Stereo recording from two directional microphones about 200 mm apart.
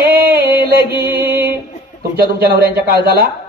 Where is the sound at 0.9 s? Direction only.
10° right (ahead or behind).